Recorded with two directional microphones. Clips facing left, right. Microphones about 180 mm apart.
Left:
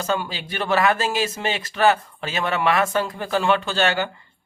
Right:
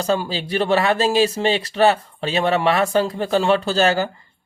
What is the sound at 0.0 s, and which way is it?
Speech, 35° right (ahead or behind).